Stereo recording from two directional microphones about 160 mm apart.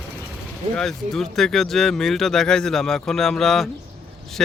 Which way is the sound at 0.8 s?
5° left (ahead or behind).